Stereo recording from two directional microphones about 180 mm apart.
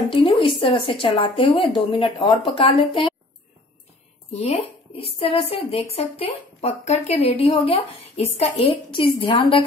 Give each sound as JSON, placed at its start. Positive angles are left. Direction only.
{"t": 0.1, "sound": "speech", "side_deg": 30}
{"t": 4.3, "sound": "speech", "side_deg": 35}